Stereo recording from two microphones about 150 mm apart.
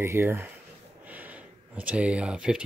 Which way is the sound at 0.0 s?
15° right (ahead or behind).